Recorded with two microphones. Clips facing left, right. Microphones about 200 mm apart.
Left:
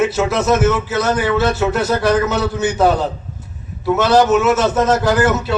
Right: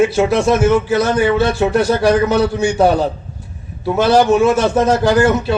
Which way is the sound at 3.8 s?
30° right (ahead or behind).